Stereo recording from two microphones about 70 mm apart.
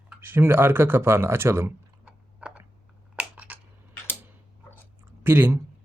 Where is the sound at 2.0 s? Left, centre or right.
Right.